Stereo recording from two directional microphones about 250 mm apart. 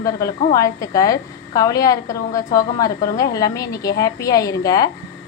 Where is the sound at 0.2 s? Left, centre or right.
Centre.